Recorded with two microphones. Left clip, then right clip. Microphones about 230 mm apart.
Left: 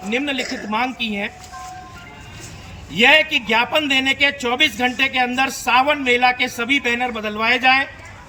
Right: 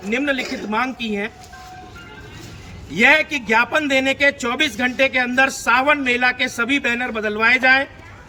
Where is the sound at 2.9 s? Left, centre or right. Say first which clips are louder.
Left 1 dB; centre.